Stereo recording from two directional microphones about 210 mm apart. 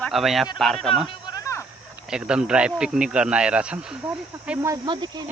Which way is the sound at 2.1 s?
5° right (ahead or behind).